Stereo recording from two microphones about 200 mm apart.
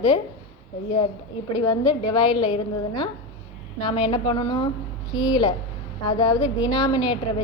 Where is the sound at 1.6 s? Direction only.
20° left (ahead or behind).